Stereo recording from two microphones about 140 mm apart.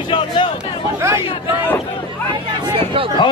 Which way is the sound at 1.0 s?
15° right (ahead or behind).